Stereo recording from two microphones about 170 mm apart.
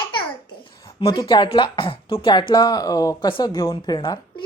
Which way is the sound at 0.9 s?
25° left (ahead or behind).